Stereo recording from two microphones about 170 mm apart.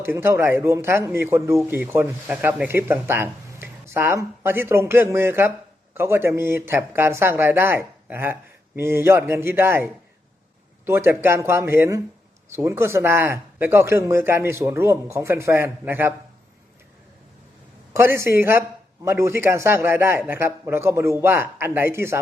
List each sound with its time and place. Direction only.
0.0 s speech: 15° right (ahead or behind)
17.9 s speech: 15° right (ahead or behind)